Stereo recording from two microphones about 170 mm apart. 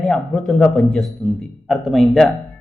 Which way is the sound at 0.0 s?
Centre (ahead or behind).